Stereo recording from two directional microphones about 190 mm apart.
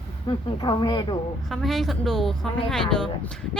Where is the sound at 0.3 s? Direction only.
25° left (ahead or behind).